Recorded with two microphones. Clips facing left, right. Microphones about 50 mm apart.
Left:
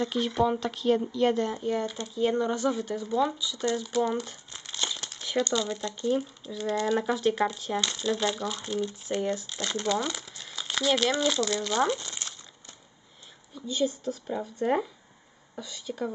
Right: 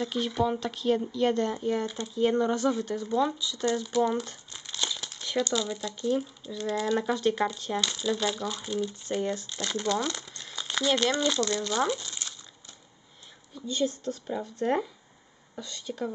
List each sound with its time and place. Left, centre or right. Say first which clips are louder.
0.0 s speech: left 2 dB; centre
12.0 s crumpling: left 1 dB; left
13.6 s speech: left 1 dB; centre